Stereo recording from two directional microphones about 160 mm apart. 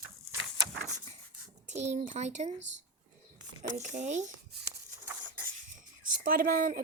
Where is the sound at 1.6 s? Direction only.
45° right (ahead or behind).